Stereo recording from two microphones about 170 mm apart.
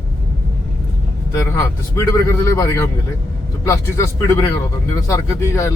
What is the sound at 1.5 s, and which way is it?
Speech, 15° left (ahead or behind).